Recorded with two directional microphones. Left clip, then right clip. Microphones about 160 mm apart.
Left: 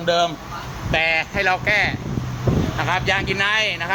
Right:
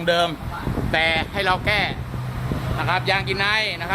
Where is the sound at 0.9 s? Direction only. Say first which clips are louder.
Left 1 dB; 10° right (ahead or behind).